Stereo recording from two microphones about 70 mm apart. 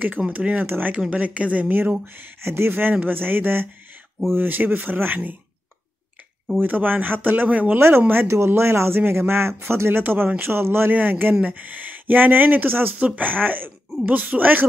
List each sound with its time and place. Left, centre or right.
0.3 s speech: right
6.6 s speech: right
8.1 s speech: right